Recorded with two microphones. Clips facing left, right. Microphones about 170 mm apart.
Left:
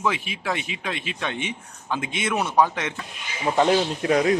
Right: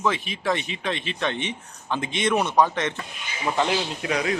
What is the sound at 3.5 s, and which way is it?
Speech, 40° left (ahead or behind).